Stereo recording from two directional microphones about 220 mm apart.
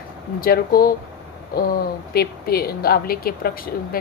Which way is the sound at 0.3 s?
40° left (ahead or behind).